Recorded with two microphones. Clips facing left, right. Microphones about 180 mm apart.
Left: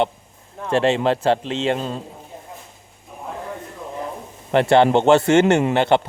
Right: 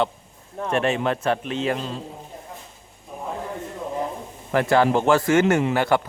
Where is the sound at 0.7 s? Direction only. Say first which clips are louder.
Left 4 dB; 30° left (ahead or behind).